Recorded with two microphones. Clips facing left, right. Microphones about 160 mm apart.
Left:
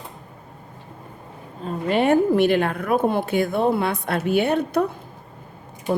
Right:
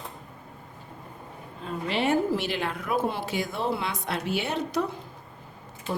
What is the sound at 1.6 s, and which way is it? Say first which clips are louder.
A woman's voice: left 7 dB; 45° left (ahead or behind).